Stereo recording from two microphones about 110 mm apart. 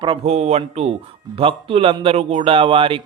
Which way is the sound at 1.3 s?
55° right (ahead or behind).